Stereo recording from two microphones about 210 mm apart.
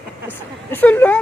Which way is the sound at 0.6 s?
10° left (ahead or behind).